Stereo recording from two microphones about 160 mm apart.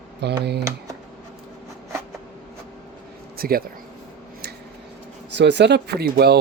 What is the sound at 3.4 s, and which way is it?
Speech, 65° right (ahead or behind).